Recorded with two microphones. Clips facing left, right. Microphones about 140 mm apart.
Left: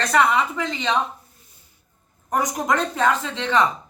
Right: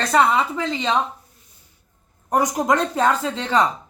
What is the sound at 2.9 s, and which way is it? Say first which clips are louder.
Speech: right 2 dB; 35° right (ahead or behind).